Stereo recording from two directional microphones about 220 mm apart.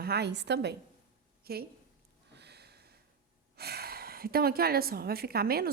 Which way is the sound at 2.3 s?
50° right (ahead or behind).